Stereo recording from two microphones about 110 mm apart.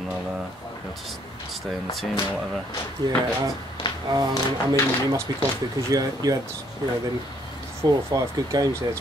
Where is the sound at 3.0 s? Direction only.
40° right (ahead or behind).